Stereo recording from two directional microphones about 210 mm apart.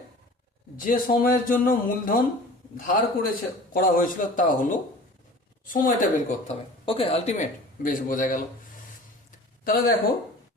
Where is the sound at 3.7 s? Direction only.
40° left (ahead or behind).